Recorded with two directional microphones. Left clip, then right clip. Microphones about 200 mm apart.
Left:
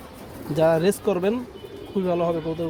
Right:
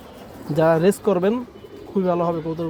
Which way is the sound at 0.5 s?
25° right (ahead or behind).